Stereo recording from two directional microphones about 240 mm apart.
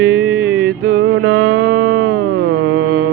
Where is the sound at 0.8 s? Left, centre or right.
Right.